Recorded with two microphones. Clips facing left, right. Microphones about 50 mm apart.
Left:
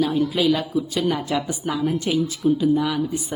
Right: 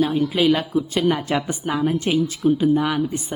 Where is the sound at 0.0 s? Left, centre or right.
Right.